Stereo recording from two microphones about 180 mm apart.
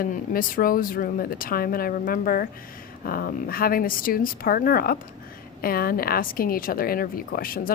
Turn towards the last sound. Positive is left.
turn(degrees=55)  # may be behind; listen again after turning